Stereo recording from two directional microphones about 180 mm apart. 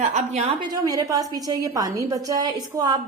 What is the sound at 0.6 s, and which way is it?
A woman's voice, 20° right (ahead or behind).